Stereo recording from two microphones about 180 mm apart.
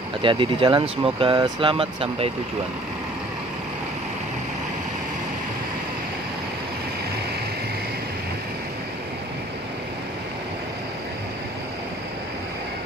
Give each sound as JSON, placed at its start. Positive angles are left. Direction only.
{"t": 0.2, "sound": "speech", "side_deg": -30}